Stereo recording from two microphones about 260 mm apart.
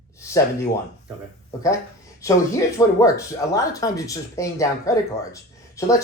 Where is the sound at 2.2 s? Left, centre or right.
Centre.